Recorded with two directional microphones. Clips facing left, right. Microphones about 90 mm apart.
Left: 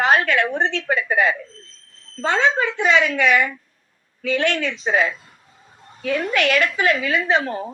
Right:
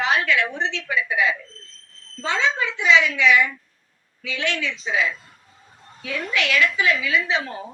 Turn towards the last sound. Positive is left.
turn(degrees=45)  # may be behind; listen again after turning